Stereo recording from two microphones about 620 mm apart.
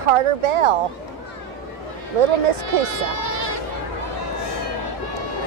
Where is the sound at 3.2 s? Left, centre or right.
Left.